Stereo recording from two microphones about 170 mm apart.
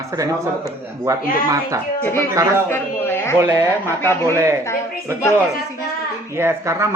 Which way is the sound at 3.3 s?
15° right (ahead or behind).